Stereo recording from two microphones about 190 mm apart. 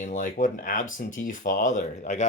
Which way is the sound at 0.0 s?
40° left (ahead or behind).